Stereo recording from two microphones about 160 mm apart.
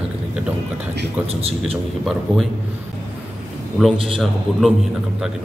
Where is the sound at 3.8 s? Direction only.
Centre (ahead or behind).